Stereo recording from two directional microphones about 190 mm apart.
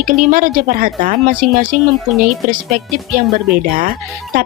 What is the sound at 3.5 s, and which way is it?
Speech, 45° right (ahead or behind).